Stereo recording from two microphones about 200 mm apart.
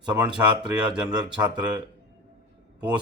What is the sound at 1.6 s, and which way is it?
Speech, 20° right (ahead or behind).